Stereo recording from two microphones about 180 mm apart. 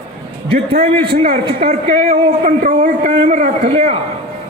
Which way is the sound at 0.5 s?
35° right (ahead or behind).